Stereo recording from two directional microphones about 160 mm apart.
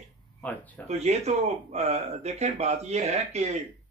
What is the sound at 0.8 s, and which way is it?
A man's voice, 40° right (ahead or behind).